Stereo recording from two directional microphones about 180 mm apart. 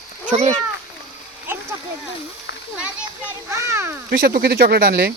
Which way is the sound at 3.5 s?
15° right (ahead or behind).